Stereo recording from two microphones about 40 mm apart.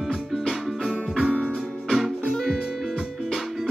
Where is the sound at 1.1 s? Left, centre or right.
Centre.